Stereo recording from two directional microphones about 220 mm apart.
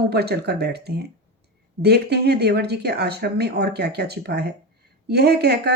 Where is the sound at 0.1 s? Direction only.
45° right (ahead or behind).